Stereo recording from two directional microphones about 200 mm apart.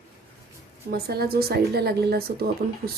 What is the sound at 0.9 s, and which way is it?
Speech, 50° right (ahead or behind).